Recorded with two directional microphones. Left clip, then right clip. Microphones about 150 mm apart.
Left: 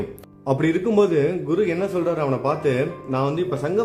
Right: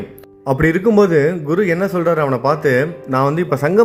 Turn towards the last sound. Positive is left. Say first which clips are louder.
# right 7 dB
turn(degrees=-35)  # may be behind; listen again after turning